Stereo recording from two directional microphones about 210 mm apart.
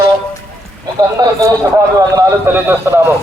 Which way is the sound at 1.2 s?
15° right (ahead or behind).